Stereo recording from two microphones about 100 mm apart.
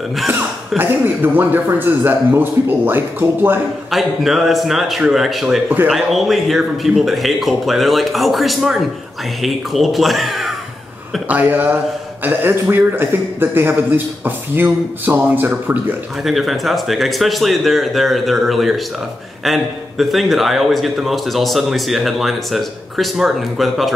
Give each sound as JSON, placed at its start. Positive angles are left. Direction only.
{"t": 0.7, "sound": "a man's voice", "side_deg": -20}
{"t": 3.9, "sound": "a man's voice", "side_deg": -5}
{"t": 11.2, "sound": "a man's voice", "side_deg": -15}
{"t": 16.3, "sound": "a man's voice", "side_deg": 0}